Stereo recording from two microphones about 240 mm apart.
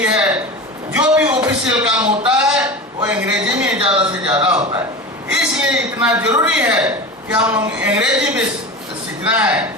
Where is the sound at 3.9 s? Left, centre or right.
Centre.